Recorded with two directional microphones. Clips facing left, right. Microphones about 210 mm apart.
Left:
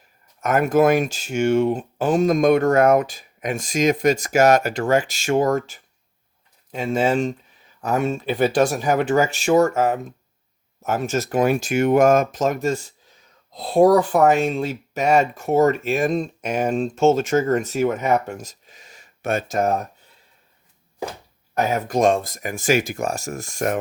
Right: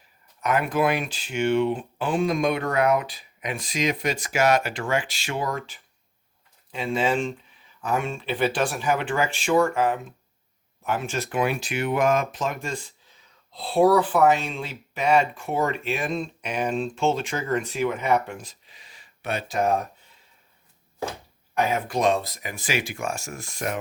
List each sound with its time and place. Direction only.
0.4 s speech: 45° left (ahead or behind)
21.5 s speech: 40° left (ahead or behind)